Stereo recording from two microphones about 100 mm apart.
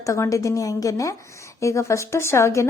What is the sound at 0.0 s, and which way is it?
Speech, 30° left (ahead or behind).